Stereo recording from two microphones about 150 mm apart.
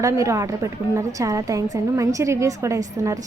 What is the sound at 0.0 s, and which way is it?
A woman's voice, 20° right (ahead or behind).